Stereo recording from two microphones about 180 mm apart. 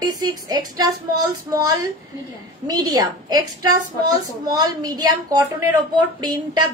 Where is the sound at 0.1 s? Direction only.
20° right (ahead or behind).